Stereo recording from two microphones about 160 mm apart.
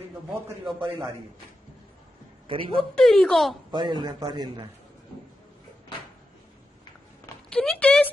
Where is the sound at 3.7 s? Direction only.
25° right (ahead or behind).